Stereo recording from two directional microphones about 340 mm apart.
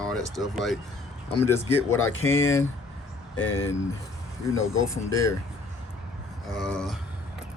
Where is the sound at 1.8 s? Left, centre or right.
Left.